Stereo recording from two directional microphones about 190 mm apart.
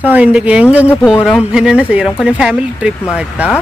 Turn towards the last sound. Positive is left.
turn(degrees=-5)  # may be behind; listen again after turning